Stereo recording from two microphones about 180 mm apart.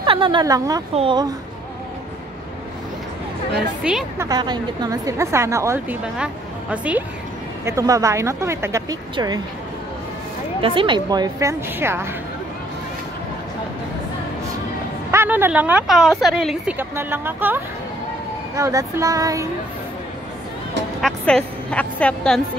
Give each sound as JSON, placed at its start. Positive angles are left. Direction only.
{"t": 0.0, "sound": "a woman's voice", "side_deg": -30}
{"t": 3.8, "sound": "a woman's voice", "side_deg": -5}
{"t": 4.2, "sound": "a woman's voice", "side_deg": -20}
{"t": 7.6, "sound": "speech", "side_deg": -20}
{"t": 10.6, "sound": "a woman's voice", "side_deg": -30}
{"t": 15.0, "sound": "speech", "side_deg": -15}
{"t": 16.7, "sound": "a woman's voice", "side_deg": -10}
{"t": 21.0, "sound": "a woman's voice", "side_deg": 5}